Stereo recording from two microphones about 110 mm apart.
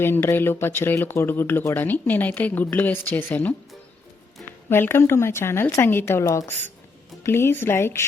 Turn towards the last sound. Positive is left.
turn(degrees=20)  # may be behind; listen again after turning